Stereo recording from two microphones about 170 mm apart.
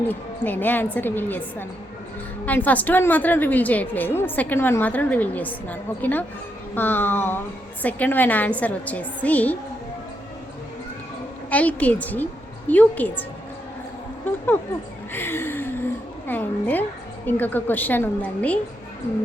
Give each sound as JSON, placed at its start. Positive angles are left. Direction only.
{"t": 0.1, "sound": "a woman's voice", "side_deg": 10}
{"t": 11.5, "sound": "a woman's voice", "side_deg": 10}
{"t": 15.1, "sound": "a sound", "side_deg": 15}
{"t": 17.2, "sound": "a woman's voice", "side_deg": 10}